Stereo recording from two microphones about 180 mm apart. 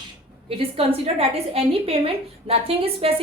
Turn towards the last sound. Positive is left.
turn(degrees=-30)  # may be behind; listen again after turning